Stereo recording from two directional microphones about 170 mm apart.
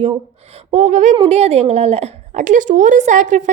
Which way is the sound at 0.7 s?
45° right (ahead or behind).